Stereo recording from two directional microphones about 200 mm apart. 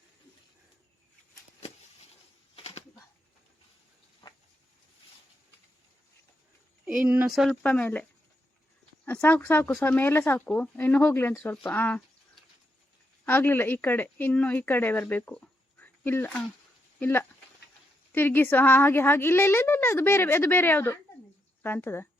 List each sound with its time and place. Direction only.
2.6 s a sound: 30° left (ahead or behind)
6.8 s speech: 5° right (ahead or behind)
9.0 s speech: 10° left (ahead or behind)
13.2 s speech: 10° left (ahead or behind)